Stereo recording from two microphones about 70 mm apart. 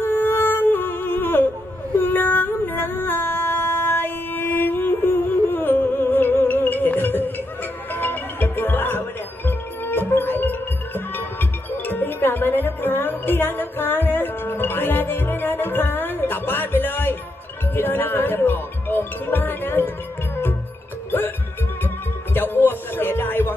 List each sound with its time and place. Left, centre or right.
0.0 s music: left
2.0 s female singing: left
7.9 s music: left
11.7 s music: left
22.3 s music: left